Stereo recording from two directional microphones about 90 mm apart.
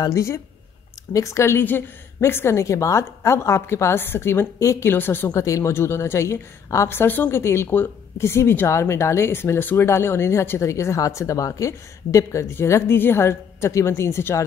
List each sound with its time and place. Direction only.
0.0 s a woman's voice: 35° left (ahead or behind)
5.3 s a woman's voice: 35° left (ahead or behind)